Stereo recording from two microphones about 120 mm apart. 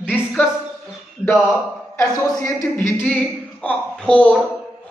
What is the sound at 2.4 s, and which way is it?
A woman's voice, 20° left (ahead or behind).